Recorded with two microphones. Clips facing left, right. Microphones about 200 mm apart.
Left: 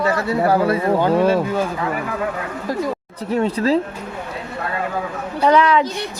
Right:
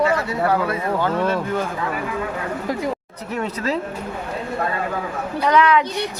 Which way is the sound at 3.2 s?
30° left (ahead or behind).